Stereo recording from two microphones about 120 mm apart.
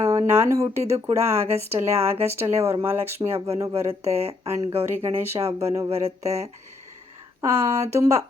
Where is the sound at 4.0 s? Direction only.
60° right (ahead or behind).